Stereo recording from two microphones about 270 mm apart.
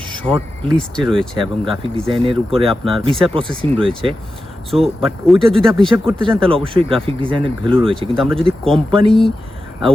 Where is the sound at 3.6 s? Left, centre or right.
Centre.